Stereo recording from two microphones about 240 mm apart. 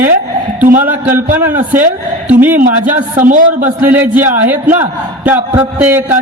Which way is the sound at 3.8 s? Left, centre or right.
Centre.